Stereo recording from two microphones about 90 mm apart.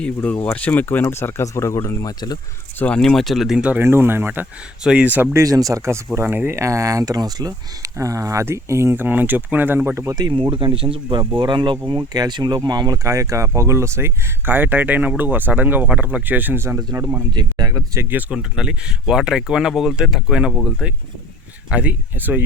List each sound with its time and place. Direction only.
0.0 s speech: 15° left (ahead or behind); by 2.4 s 45° left (ahead or behind)
2.7 s speech: 15° left (ahead or behind)
3.0 s speech: 5° left (ahead or behind)
3.8 s speech: 25° right (ahead or behind)
4.8 s speech: 10° right (ahead or behind)
5.3 s speech: 40° right (ahead or behind)
10.2 s speech: 70° right (ahead or behind)
11.3 s speech: 60° right (ahead or behind)
11.9 s speech: 50° right (ahead or behind)
13.1 s speech: 35° right (ahead or behind); by 16.6 s 20° right (ahead or behind)
16.6 s speech: 35° right (ahead or behind)
17.3 s speech: 45° right (ahead or behind)
18.1 s speech: 15° right (ahead or behind)